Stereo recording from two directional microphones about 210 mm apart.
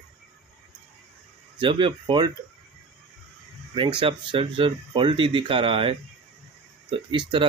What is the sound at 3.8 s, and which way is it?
Speech, 25° right (ahead or behind).